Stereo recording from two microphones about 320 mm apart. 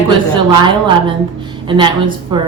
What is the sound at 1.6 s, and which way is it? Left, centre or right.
Speech, centre.